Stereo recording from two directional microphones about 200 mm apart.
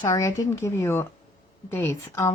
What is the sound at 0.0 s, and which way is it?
Speech, 15° left (ahead or behind).